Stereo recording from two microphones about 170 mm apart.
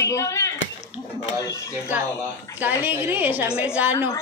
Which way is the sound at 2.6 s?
10° right (ahead or behind).